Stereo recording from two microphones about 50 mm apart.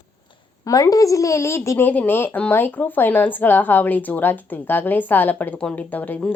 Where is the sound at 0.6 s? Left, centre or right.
Left.